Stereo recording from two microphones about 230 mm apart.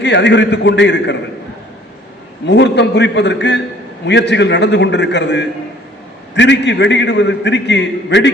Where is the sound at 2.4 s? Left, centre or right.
Left.